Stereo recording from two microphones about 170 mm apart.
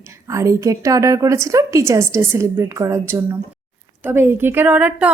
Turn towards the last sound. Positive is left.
turn(degrees=-10)  # may be behind; listen again after turning